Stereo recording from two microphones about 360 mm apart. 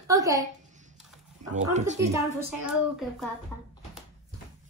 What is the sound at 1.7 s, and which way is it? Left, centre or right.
Speech, centre.